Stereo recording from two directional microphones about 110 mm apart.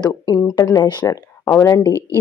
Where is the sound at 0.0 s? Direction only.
35° left (ahead or behind).